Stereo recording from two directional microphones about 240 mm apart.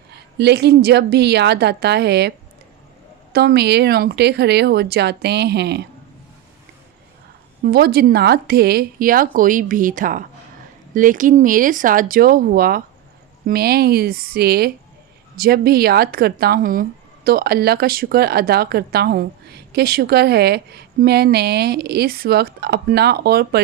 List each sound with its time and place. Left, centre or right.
0.1 s speech: right
3.3 s speech: right
7.6 s speech: right